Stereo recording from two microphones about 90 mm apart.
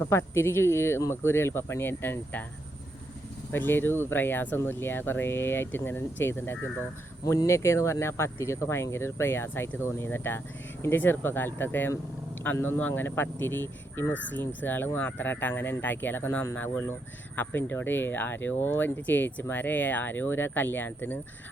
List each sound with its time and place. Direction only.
0.0 s speech: 30° left (ahead or behind)
3.5 s speech: 25° left (ahead or behind)